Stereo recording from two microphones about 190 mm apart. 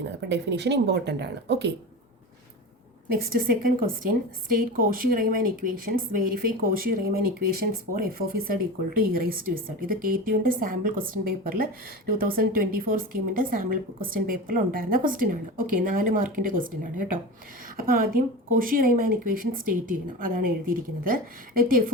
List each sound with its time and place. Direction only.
0.2 s speech: 65° right (ahead or behind)
3.1 s a woman's voice: 50° right (ahead or behind)